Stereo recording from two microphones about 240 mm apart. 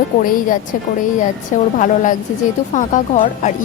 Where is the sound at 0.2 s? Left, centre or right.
Left.